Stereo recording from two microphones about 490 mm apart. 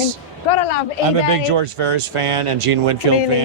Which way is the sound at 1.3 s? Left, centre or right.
Right.